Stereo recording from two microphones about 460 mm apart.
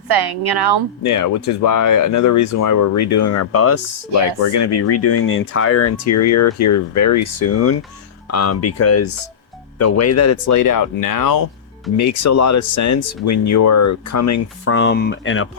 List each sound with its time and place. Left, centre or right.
0.1 s a woman's voice: right
1.0 s speech: left
4.9 s speech: left